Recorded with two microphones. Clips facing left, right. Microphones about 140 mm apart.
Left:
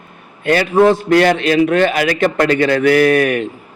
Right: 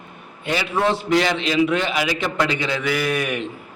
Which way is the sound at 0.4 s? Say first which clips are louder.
Left 10 dB; 55° left (ahead or behind).